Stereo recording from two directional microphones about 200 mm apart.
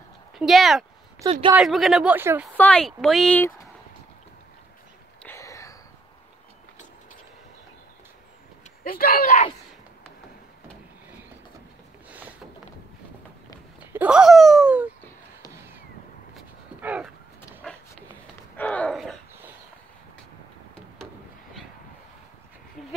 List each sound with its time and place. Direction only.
0.4 s speech: centre (ahead or behind)
1.2 s a woman's voice: 20° right (ahead or behind)
1.6 s speech: centre (ahead or behind)
2.5 s speech: 5° left (ahead or behind)
5.2 s a sound: 15° left (ahead or behind)
8.8 s speech: 45° left (ahead or behind)
13.9 s speech: 5° right (ahead or behind)
16.3 s dog: 5° right (ahead or behind)
17.6 s a sound: 5° left (ahead or behind)
22.8 s sheep: centre (ahead or behind)